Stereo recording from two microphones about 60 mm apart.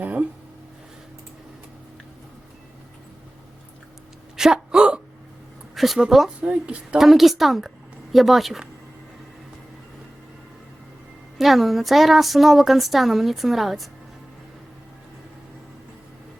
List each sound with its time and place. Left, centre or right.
0.0 s a sound: right
4.4 s a sound: centre
5.7 s speech: centre
6.4 s speech: centre
7.0 s speech: centre
11.3 s speech: centre